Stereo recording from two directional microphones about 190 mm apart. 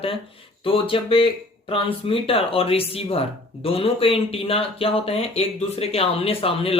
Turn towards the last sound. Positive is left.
turn(degrees=30)  # may be behind; listen again after turning